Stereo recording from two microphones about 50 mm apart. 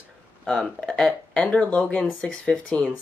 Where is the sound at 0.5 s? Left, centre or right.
Centre.